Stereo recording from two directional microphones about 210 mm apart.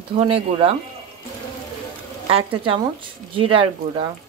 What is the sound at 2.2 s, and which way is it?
Speech, 25° right (ahead or behind).